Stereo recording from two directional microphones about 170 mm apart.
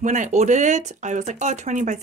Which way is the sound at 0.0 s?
45° right (ahead or behind).